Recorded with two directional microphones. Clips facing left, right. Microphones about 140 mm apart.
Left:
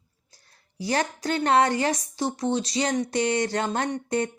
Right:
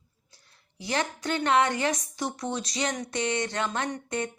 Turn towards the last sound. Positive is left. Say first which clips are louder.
# left 5 dB
turn(degrees=35)  # may be behind; listen again after turning